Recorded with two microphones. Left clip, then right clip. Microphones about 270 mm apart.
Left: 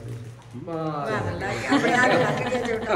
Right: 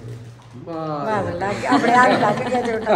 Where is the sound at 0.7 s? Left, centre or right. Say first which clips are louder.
Right 4 dB; right.